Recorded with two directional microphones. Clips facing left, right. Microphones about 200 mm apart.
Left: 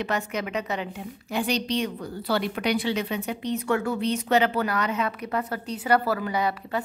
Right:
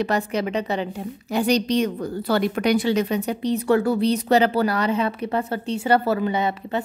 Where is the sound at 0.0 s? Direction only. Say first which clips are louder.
Right 6 dB; 35° right (ahead or behind).